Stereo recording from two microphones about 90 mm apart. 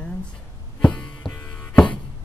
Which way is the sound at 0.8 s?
10° left (ahead or behind).